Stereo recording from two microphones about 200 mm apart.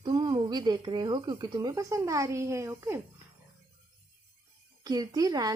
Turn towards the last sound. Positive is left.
turn(degrees=-20)  # may be behind; listen again after turning